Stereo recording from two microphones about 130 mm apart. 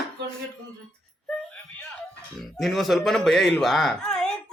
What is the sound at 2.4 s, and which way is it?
A man's voice, centre (ahead or behind).